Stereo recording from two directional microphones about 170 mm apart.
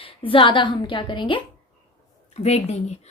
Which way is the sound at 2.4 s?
40° left (ahead or behind).